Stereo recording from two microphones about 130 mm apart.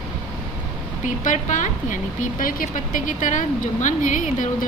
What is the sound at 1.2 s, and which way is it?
A woman's voice, 75° left (ahead or behind).